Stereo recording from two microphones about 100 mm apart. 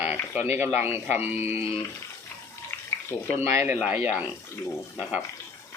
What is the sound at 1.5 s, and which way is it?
Speech, 80° left.